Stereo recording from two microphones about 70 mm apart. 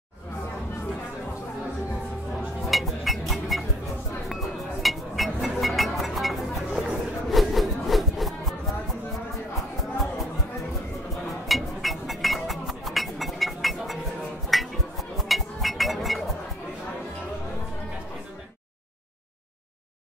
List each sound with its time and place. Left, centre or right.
2.7 s music: centre
11.4 s music: centre